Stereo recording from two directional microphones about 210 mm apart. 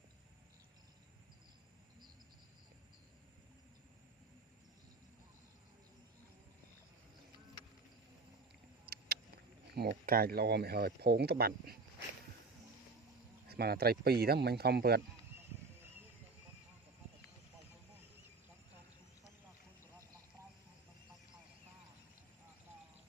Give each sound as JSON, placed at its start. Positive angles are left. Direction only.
{"t": 9.7, "sound": "speech", "side_deg": -45}
{"t": 13.5, "sound": "speech", "side_deg": -50}